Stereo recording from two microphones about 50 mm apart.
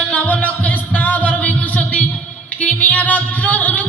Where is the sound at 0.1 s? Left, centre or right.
Left.